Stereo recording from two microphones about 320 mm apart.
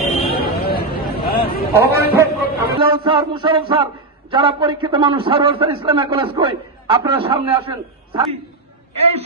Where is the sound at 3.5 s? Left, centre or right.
Centre.